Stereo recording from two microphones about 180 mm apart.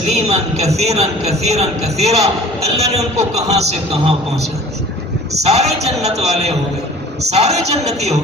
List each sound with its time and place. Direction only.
0.3 s a man's voice: 35° right (ahead or behind)
5.4 s a man's voice: 35° right (ahead or behind)